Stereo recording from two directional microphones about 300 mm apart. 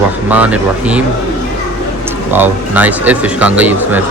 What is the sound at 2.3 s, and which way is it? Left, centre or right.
A man's voice, centre.